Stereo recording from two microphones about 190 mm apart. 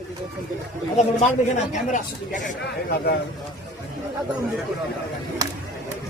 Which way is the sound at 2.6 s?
55° left (ahead or behind).